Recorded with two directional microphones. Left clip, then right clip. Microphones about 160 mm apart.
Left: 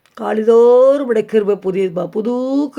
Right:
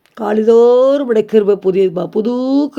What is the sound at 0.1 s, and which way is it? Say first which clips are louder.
Speech: right 2 dB; 25° right (ahead or behind).